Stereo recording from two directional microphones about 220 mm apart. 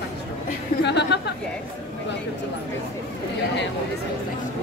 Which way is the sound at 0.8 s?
50° left (ahead or behind).